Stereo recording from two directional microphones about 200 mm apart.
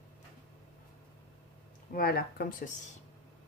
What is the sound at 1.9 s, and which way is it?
Speech, 50° left (ahead or behind).